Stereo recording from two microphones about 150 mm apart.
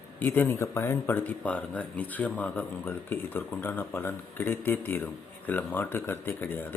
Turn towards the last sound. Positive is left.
turn(degrees=10)  # may be behind; listen again after turning